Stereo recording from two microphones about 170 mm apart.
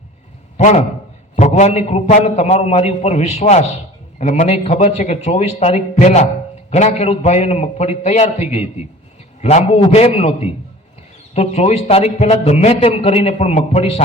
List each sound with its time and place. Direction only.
0.5 s a man's voice: 45° left (ahead or behind)